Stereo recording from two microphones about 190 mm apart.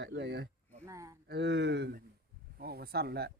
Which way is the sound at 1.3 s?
65° right (ahead or behind).